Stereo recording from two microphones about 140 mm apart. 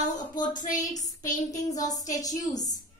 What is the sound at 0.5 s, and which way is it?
Speech, 65° left (ahead or behind).